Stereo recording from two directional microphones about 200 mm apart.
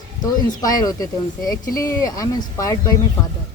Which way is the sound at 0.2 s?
20° left (ahead or behind).